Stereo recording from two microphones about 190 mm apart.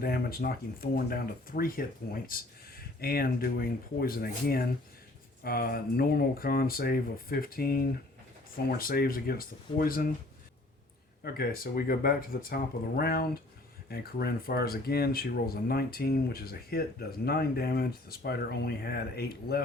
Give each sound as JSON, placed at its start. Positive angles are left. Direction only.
{"t": 0.0, "sound": "speech", "side_deg": 50}
{"t": 11.2, "sound": "speech", "side_deg": 50}